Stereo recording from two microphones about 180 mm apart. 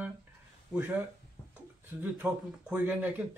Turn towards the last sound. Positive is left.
turn(degrees=-10)  # may be behind; listen again after turning